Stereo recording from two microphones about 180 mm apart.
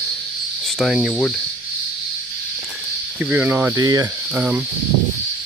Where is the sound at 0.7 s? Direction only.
Centre (ahead or behind).